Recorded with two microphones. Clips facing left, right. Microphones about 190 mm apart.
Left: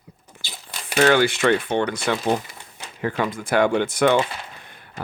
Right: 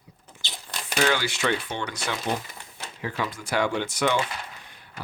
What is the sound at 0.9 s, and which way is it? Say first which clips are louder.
Speech: left 8 dB; 55° left (ahead or behind).